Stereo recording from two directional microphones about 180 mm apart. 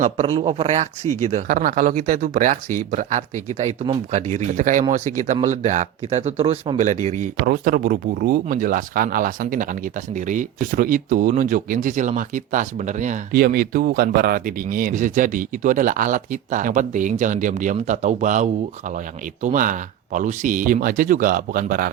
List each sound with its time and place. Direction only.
0.0 s speech: 30° right (ahead or behind)
6.7 s speech: 45° right (ahead or behind)
7.4 s speech: 55° right (ahead or behind)